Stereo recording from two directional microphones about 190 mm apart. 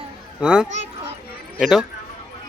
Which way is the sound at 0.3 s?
5° right (ahead or behind).